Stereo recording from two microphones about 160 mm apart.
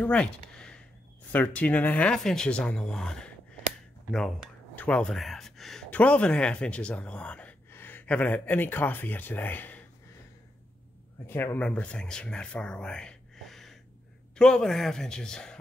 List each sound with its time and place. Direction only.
0.0 s a sound: 5° left (ahead or behind)
1.3 s speech: 10° left (ahead or behind)
4.7 s speech: 5° left (ahead or behind)
11.2 s a man's voice: 15° left (ahead or behind)